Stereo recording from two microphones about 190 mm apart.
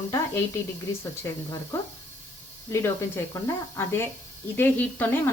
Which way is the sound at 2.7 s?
15° left (ahead or behind).